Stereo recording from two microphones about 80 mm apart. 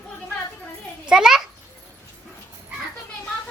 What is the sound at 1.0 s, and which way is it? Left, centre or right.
Speech, centre.